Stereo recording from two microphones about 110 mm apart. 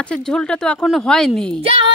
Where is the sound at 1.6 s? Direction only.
55° right (ahead or behind).